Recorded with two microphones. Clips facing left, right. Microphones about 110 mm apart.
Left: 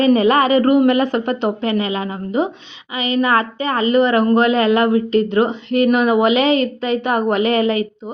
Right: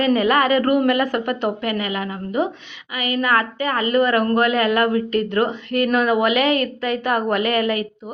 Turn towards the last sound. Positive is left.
turn(degrees=25)  # may be behind; listen again after turning